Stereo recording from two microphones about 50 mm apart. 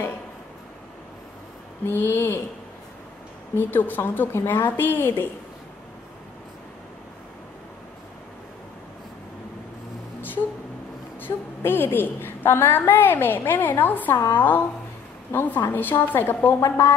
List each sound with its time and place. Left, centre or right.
1.9 s a woman's voice: left
3.5 s a woman's voice: left
11.1 s a woman's voice: left